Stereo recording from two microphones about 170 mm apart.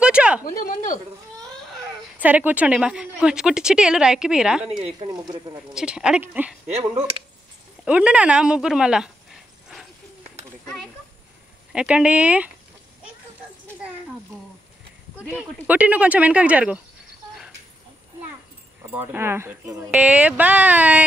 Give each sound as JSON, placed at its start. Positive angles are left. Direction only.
{"t": 0.0, "sound": "a sound", "side_deg": -5}
{"t": 0.4, "sound": "speech", "side_deg": 60}
{"t": 2.1, "sound": "a woman's voice", "side_deg": -10}
{"t": 4.6, "sound": "speech", "side_deg": -35}
{"t": 5.0, "sound": "speech", "side_deg": -25}
{"t": 5.8, "sound": "a woman's voice", "side_deg": -5}
{"t": 6.8, "sound": "speech", "side_deg": -35}
{"t": 7.8, "sound": "a woman's voice", "side_deg": -5}
{"t": 11.7, "sound": "speech", "side_deg": -5}
{"t": 15.2, "sound": "speech", "side_deg": -10}
{"t": 19.1, "sound": "speech", "side_deg": -15}